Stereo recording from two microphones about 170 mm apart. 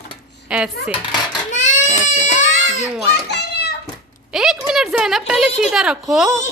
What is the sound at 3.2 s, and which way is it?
Children playing, 80° left.